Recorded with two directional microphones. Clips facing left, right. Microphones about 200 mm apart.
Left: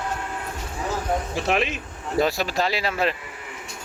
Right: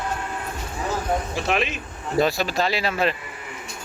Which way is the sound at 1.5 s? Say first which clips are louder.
Left 1 dB; 40° left (ahead or behind).